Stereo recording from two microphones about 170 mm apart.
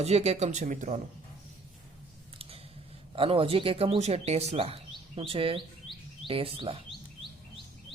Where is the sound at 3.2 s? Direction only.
30° right (ahead or behind).